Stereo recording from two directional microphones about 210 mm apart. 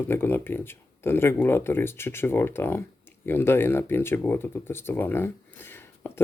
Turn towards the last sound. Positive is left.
turn(degrees=10)  # may be behind; listen again after turning